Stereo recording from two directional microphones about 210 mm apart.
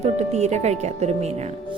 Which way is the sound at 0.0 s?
30° right (ahead or behind).